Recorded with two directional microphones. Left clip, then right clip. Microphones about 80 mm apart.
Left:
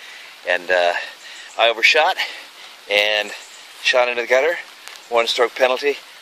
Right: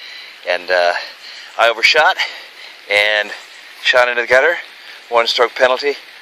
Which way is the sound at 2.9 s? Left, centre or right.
Left.